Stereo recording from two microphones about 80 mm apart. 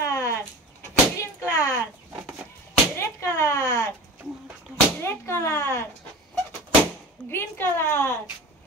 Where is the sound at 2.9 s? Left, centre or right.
Left.